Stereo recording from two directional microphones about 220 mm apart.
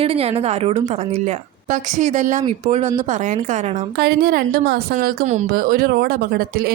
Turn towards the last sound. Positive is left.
turn(degrees=-45)  # may be behind; listen again after turning